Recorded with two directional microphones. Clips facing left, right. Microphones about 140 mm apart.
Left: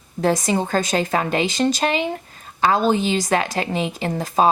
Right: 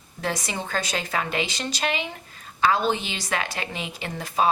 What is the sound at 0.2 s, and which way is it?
A woman's voice, 40° left (ahead or behind).